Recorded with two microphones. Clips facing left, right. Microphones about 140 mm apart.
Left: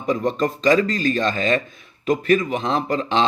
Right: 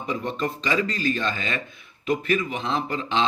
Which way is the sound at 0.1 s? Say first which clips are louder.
Left 7 dB; 40° left (ahead or behind).